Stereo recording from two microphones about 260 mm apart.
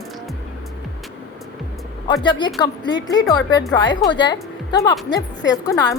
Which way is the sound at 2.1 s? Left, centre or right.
Centre.